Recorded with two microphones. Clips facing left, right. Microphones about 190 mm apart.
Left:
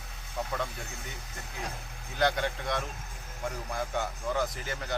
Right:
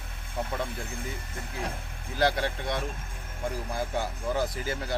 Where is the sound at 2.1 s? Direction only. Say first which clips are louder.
Right 2 dB; 30° right (ahead or behind).